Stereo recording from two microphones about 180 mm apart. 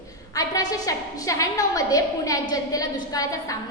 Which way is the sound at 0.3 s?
20° left (ahead or behind).